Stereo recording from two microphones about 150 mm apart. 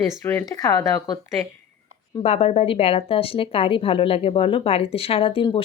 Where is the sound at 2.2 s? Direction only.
40° left (ahead or behind).